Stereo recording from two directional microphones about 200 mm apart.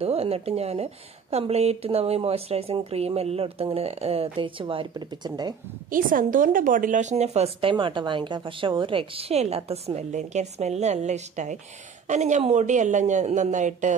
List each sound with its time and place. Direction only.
0.0 s a woman's voice: 30° right (ahead or behind)
5.9 s a woman's voice: 45° right (ahead or behind)